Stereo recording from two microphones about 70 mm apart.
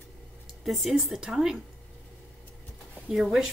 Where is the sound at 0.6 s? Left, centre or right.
Centre.